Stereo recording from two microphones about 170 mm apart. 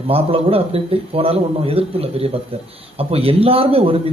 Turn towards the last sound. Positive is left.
turn(degrees=-35)  # may be behind; listen again after turning